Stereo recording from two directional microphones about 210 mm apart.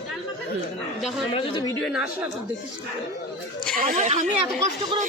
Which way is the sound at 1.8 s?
5° right (ahead or behind).